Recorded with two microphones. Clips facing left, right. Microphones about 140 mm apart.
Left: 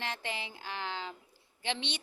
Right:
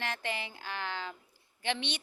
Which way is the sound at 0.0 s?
20° left (ahead or behind).